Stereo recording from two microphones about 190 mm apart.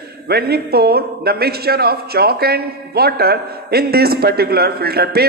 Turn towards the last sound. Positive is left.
turn(degrees=-55)  # may be behind; listen again after turning